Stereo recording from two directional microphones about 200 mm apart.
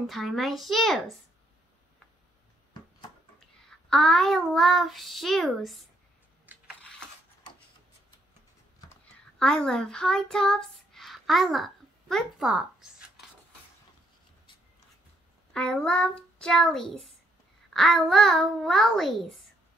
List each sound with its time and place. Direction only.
0.0 s a child's voice: centre (ahead or behind)
2.8 s a sound: 20° left (ahead or behind)
3.9 s a child's voice: 5° left (ahead or behind)
6.5 s a sound: 10° right (ahead or behind)
9.4 s a child's voice: 5° left (ahead or behind)
15.5 s a child's voice: 5° left (ahead or behind)